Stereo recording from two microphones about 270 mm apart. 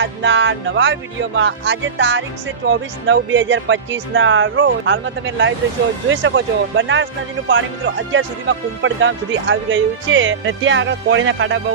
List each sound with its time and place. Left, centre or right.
0.0 s speech: right